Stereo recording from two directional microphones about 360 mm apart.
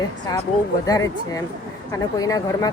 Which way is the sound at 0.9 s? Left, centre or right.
Centre.